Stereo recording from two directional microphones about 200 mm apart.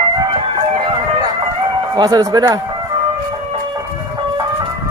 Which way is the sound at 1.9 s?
20° right (ahead or behind).